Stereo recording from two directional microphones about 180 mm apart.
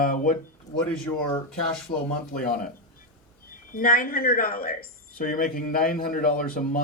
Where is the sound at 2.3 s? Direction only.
50° left (ahead or behind).